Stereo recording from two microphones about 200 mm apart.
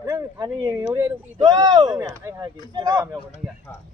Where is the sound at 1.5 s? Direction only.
20° right (ahead or behind).